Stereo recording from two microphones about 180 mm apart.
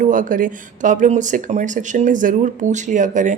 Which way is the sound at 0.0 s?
45° right (ahead or behind).